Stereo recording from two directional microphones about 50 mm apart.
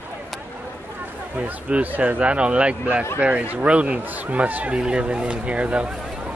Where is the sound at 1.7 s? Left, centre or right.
Right.